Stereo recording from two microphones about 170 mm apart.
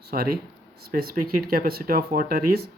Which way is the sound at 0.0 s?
65° right (ahead or behind).